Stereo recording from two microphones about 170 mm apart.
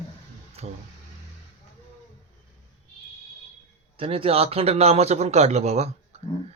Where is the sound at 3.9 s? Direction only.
35° right (ahead or behind).